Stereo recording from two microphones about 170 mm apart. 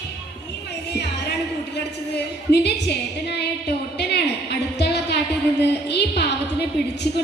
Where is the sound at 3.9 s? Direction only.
80° left.